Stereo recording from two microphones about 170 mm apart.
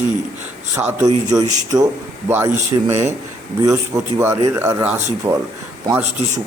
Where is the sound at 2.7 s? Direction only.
25° right (ahead or behind).